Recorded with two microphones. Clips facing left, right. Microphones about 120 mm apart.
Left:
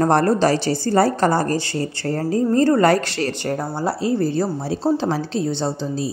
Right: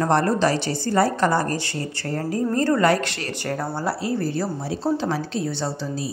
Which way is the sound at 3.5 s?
20° left (ahead or behind).